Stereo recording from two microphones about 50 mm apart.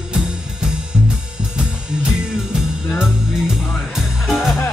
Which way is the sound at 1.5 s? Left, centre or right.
Centre.